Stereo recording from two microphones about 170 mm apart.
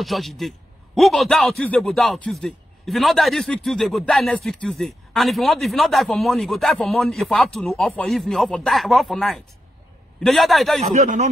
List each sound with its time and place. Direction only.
0.0 s a man's voice: centre (ahead or behind)
10.9 s speech: 50° right (ahead or behind)